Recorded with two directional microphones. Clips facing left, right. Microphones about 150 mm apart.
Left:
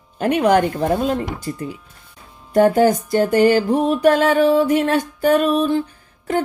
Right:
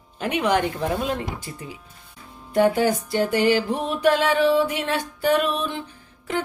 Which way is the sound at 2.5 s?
45° left (ahead or behind).